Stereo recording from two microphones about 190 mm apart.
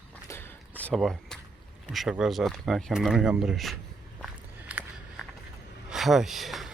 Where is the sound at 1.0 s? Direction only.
Centre (ahead or behind).